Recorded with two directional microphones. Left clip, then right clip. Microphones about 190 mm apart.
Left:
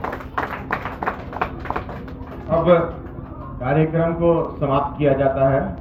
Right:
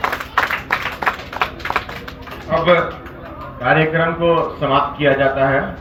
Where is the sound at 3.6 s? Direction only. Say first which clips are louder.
Right 5 dB; 25° right (ahead or behind).